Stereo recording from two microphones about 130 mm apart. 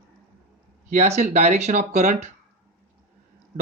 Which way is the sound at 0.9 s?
60° right (ahead or behind).